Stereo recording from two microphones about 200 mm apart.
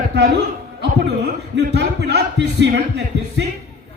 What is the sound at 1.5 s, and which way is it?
A man's voice, 60° right (ahead or behind).